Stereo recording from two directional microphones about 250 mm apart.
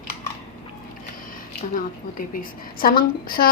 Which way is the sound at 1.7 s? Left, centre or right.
Left.